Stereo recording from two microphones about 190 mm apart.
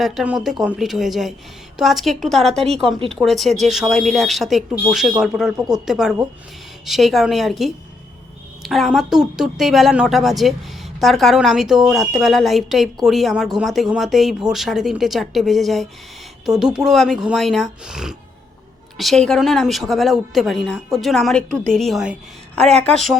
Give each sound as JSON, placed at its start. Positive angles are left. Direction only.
{"t": 0.0, "sound": "a woman's voice", "side_deg": 0}
{"t": 5.5, "sound": "speech", "side_deg": -20}
{"t": 5.8, "sound": "a woman's voice", "side_deg": 0}